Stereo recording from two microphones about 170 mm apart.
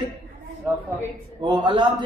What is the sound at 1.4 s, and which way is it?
Speech, 25° right (ahead or behind).